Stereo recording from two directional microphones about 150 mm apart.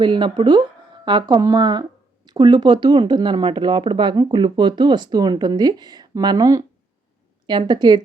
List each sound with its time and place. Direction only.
0.0 s speech: 30° right (ahead or behind)